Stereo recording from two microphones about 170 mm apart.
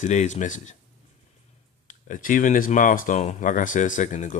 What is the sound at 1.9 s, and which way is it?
Speech, 50° left (ahead or behind).